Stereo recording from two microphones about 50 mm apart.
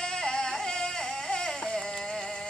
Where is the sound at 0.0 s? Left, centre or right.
Centre.